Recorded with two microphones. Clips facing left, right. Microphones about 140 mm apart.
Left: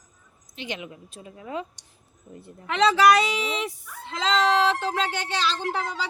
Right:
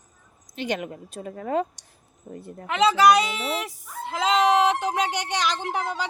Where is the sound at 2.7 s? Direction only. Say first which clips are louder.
Right 1 dB; centre (ahead or behind).